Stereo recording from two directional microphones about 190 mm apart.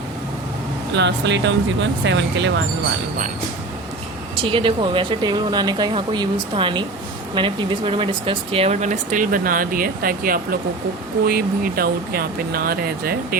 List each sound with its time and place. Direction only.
0.9 s speech: 65° right (ahead or behind)
4.4 s speech: 30° right (ahead or behind); by 13.1 s 55° right (ahead or behind)